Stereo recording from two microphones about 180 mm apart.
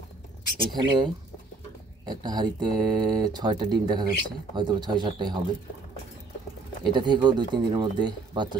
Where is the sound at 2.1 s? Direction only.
25° right (ahead or behind).